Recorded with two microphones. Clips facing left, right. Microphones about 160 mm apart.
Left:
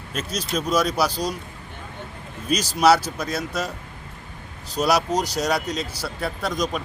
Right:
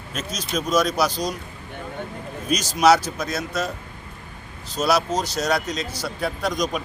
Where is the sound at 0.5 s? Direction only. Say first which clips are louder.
Right 1 dB; 10° left (ahead or behind).